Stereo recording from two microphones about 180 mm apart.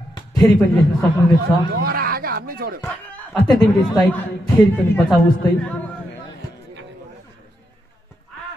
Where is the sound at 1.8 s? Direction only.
55° right (ahead or behind).